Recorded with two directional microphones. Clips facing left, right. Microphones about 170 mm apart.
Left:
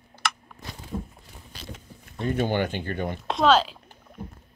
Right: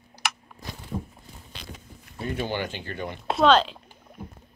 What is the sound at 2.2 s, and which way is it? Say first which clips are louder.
Speech: left 4 dB; 50° left (ahead or behind).